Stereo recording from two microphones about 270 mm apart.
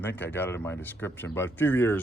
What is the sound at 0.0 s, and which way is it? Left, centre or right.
Speech, centre.